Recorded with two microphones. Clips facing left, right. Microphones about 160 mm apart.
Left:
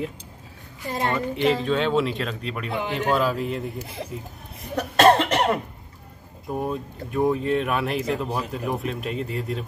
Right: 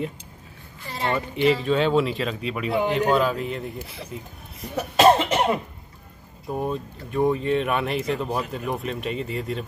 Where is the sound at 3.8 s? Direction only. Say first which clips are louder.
Left 3 dB; 50° left (ahead or behind).